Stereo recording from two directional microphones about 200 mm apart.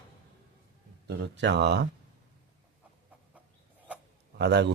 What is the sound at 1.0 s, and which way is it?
Speech, 60° right (ahead or behind).